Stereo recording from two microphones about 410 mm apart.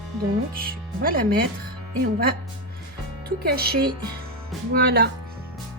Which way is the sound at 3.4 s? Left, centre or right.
Right.